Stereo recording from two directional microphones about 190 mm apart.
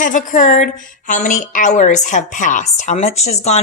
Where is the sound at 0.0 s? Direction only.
40° left (ahead or behind).